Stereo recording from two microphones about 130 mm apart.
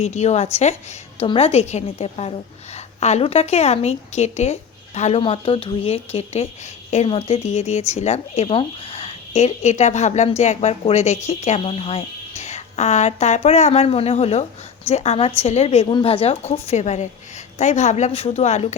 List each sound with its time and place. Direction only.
0.0 s speech: 60° left (ahead or behind)
5.2 s a woman's voice: 45° left (ahead or behind)
15.9 s speech: 40° left (ahead or behind); by 18.7 s 55° left (ahead or behind)